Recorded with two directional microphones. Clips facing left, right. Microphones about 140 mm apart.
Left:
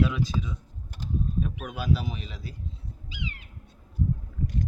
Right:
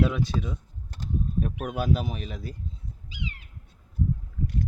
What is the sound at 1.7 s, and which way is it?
Speech, 55° right (ahead or behind).